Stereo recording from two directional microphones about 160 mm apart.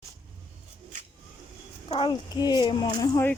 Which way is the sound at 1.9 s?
30° left (ahead or behind).